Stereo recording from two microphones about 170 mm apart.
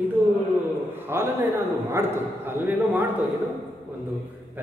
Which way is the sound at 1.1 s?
15° right (ahead or behind).